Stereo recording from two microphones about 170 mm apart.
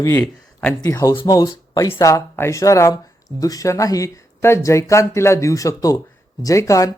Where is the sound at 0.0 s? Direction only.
15° left (ahead or behind).